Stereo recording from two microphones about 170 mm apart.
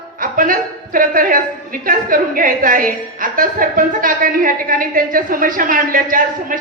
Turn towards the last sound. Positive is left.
turn(degrees=-55)  # may be behind; listen again after turning